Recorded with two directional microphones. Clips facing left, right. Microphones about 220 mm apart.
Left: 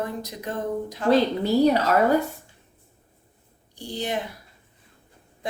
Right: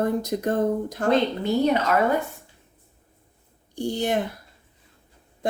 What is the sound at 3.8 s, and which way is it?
Speech, 50° right (ahead or behind).